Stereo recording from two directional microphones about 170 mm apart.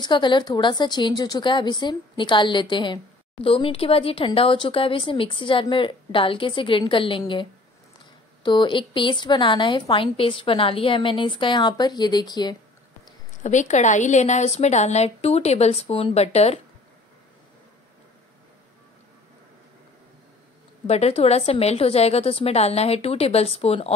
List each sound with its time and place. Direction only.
0.0 s a woman's voice: 25° left (ahead or behind)
8.5 s a woman's voice: 30° left (ahead or behind)
13.4 s speech: 45° left (ahead or behind)
20.8 s speech: 40° left (ahead or behind)